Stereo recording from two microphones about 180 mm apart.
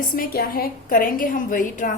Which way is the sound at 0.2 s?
55° left (ahead or behind).